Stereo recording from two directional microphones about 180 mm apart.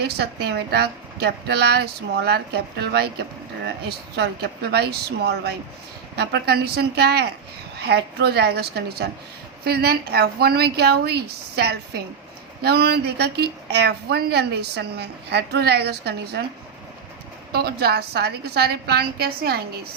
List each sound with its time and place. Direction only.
0.0 s a woman's voice: 65° right (ahead or behind)
4.7 s a woman's voice: 65° right (ahead or behind)
17.5 s a woman's voice: 60° right (ahead or behind)